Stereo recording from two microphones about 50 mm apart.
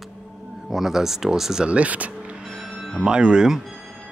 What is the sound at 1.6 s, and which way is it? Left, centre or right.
Speech, right.